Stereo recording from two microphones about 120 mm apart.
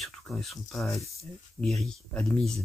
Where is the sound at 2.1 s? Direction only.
5° left (ahead or behind).